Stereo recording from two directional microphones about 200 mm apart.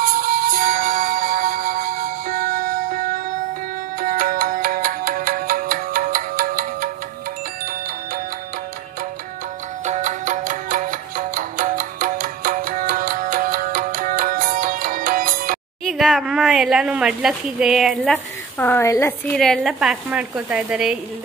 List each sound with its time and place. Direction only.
0.0 s music: 45° right (ahead or behind)
9.8 s music: 35° right (ahead or behind)
15.8 s speech: centre (ahead or behind)